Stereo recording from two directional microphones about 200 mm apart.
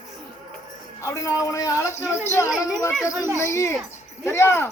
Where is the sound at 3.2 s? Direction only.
15° right (ahead or behind).